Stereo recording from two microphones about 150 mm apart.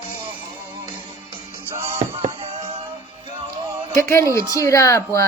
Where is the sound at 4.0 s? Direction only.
15° left (ahead or behind).